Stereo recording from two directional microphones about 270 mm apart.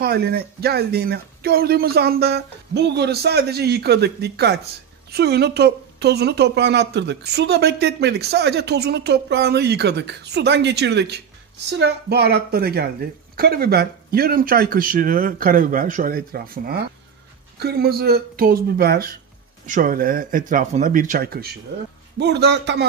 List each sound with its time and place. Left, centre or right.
0.0 s speech: right